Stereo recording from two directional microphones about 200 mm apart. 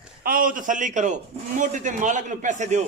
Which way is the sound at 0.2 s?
45° right (ahead or behind).